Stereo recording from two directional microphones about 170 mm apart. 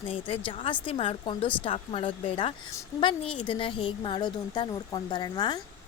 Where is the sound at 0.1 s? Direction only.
30° left (ahead or behind).